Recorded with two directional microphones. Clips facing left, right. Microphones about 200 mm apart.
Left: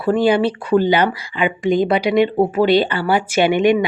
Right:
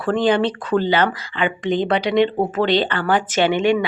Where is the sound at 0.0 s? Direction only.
10° left (ahead or behind).